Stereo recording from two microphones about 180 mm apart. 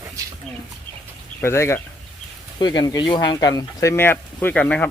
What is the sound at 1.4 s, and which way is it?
Speech, 15° left (ahead or behind).